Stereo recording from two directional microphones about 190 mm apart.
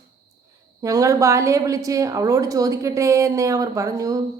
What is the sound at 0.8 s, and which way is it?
A woman's voice, 20° right (ahead or behind).